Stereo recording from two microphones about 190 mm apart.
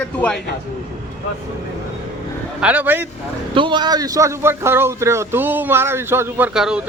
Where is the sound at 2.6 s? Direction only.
10° right (ahead or behind).